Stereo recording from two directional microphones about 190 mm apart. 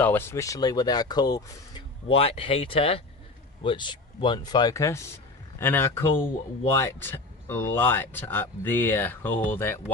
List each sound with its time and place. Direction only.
0.0 s speech: 10° left (ahead or behind)